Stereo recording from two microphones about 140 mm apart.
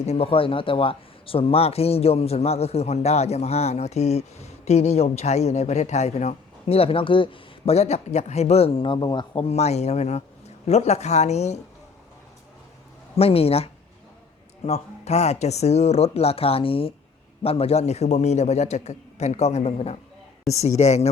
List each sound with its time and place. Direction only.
0.0 s speech: 45° left (ahead or behind)
13.1 s speech: 45° left (ahead or behind)